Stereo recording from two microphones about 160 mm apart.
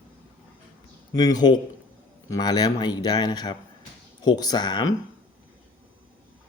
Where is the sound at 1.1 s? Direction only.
25° left (ahead or behind).